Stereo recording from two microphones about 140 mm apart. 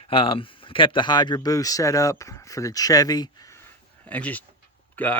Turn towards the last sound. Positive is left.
turn(degrees=10)  # may be behind; listen again after turning